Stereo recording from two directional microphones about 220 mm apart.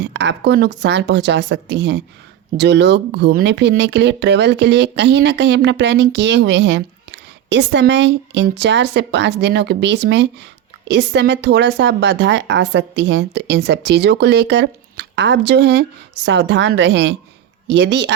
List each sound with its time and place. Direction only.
0.0 s speech: 55° right (ahead or behind)